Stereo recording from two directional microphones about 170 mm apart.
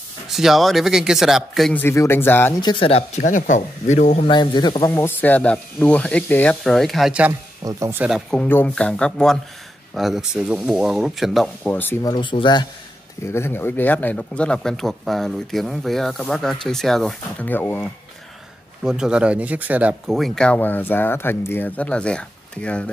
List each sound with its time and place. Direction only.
0.3 s speech: centre (ahead or behind)
1.8 s speech: 15° left (ahead or behind)
2.6 s speech: 30° left (ahead or behind)
4.3 s speech: 25° left (ahead or behind); by 7.3 s 5° right (ahead or behind)
7.6 s speech: 20° right (ahead or behind)
8.0 s speech: 5° right (ahead or behind)
8.4 s speech: 10° left (ahead or behind)
12.1 s speech: 30° left (ahead or behind)
13.2 s speech: 15° left (ahead or behind)
18.8 s speech: 5° right (ahead or behind)